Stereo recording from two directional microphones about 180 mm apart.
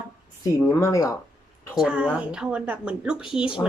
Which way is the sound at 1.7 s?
5° right (ahead or behind).